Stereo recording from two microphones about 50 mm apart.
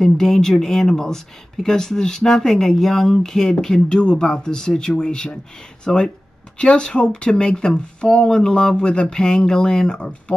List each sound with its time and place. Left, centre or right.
0.0 s speech: centre